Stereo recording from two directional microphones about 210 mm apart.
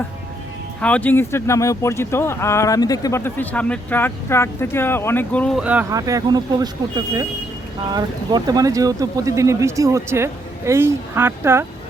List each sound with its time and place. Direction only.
0.8 s speech: 5° left (ahead or behind); by 11.6 s 10° right (ahead or behind)